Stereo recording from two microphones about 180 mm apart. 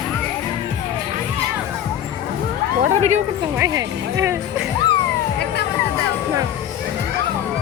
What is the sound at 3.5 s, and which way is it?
Speech, 15° right (ahead or behind).